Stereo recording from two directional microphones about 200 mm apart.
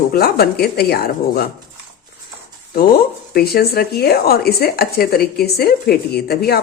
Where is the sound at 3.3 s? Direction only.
50° left (ahead or behind).